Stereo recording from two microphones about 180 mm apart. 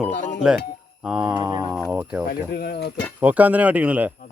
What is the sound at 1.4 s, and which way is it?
Speech, 20° right (ahead or behind).